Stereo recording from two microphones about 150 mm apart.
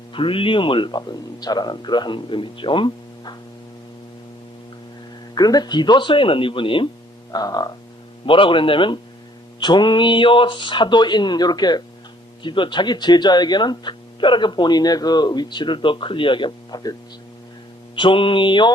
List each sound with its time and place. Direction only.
0.1 s speech: 35° left (ahead or behind)
5.3 s speech: 25° left (ahead or behind)
7.3 s frog: 25° left (ahead or behind)
8.3 s speech: 35° left (ahead or behind)
17.9 s speech: 35° left (ahead or behind)